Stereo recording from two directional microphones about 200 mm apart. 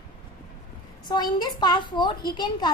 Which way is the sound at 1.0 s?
20° left (ahead or behind).